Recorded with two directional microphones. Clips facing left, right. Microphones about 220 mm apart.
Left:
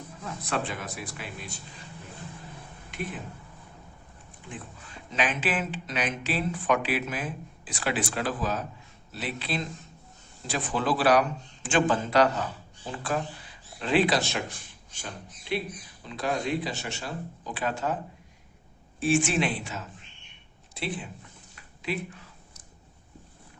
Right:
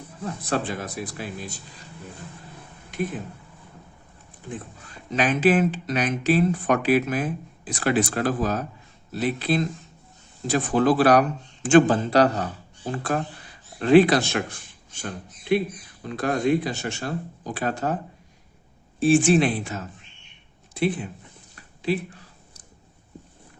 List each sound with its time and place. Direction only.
0.2 s speech: 40° right (ahead or behind)
5.1 s speech: 40° right (ahead or behind)
18.9 s speech: 35° right (ahead or behind); by 21.1 s 50° right (ahead or behind)
21.5 s a sound: 35° right (ahead or behind)